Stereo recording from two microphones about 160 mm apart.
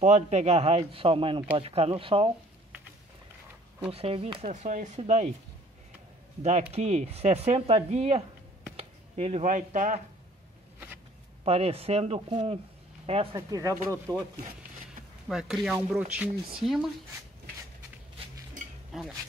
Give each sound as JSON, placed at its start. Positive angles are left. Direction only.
{"t": 0.0, "sound": "speech", "side_deg": -45}
{"t": 3.9, "sound": "speech", "side_deg": -35}
{"t": 6.7, "sound": "speech", "side_deg": -45}
{"t": 11.4, "sound": "speech", "side_deg": -40}
{"t": 13.5, "sound": "speech", "side_deg": -20}
{"t": 15.2, "sound": "speech", "side_deg": 0}
{"t": 18.9, "sound": "speech", "side_deg": 0}